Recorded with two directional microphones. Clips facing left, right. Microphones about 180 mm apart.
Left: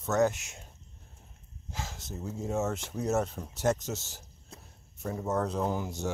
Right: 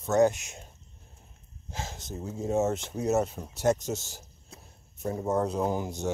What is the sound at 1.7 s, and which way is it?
Speech, 20° right (ahead or behind).